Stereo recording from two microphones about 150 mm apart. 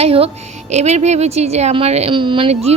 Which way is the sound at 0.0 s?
40° right (ahead or behind).